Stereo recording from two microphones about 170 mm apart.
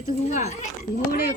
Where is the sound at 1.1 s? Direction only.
65° left (ahead or behind).